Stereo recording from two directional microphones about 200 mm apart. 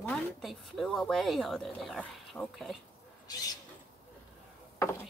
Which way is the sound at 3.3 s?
20° left (ahead or behind).